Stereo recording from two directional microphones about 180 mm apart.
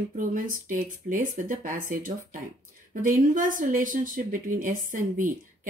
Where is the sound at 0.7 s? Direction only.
50° right (ahead or behind).